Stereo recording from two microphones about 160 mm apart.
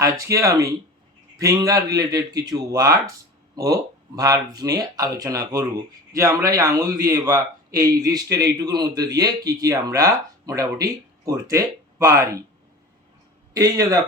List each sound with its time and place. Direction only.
0.0 s a man's voice: 20° right (ahead or behind)
13.5 s a man's voice: 20° right (ahead or behind)